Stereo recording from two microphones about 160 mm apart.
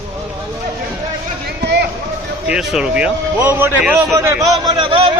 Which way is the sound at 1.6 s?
90° right.